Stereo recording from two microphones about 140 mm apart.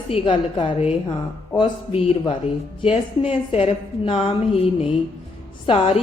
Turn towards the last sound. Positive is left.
turn(degrees=45)  # may be behind; listen again after turning